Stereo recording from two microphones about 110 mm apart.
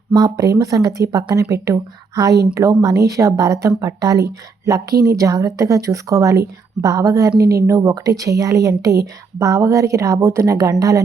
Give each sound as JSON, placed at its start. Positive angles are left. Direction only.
{"t": 0.1, "sound": "a woman's voice", "side_deg": -40}